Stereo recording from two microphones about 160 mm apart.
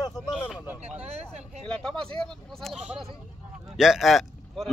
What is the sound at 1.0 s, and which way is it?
Vehicle, 45° right (ahead or behind).